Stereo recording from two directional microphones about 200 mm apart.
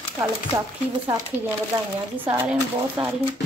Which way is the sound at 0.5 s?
10° right (ahead or behind).